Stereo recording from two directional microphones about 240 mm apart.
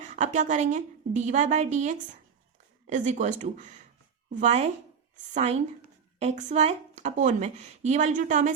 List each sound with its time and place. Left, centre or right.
0.1 s a woman's voice: right